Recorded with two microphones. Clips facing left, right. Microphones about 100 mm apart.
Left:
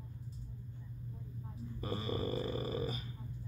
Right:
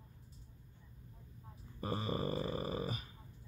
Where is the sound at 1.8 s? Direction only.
35° right (ahead or behind).